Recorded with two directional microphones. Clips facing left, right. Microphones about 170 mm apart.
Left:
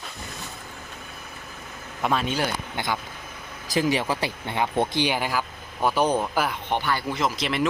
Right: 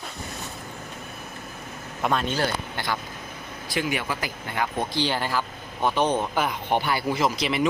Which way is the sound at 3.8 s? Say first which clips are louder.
Left 4 dB; 35° left (ahead or behind).